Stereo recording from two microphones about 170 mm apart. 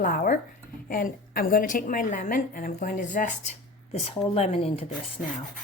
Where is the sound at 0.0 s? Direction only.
55° left (ahead or behind).